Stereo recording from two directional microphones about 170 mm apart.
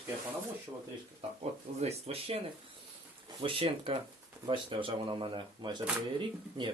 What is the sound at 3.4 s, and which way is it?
Speech, 30° right (ahead or behind).